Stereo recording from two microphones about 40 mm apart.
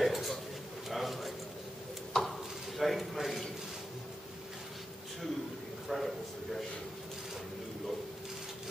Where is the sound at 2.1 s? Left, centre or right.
Centre.